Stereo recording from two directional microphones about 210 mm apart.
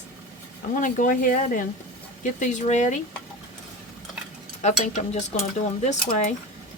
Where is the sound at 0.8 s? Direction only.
40° left (ahead or behind).